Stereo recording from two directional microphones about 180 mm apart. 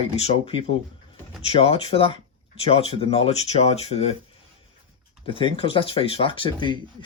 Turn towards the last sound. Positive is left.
turn(degrees=25)  # may be behind; listen again after turning